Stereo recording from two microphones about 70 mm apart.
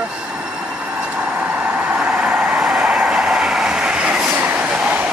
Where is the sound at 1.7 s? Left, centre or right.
Centre.